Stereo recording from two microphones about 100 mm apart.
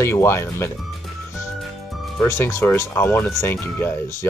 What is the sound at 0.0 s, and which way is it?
Speech, 25° left (ahead or behind).